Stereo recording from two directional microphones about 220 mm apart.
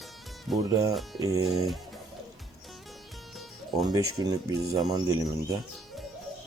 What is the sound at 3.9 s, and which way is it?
Speech, 15° right (ahead or behind).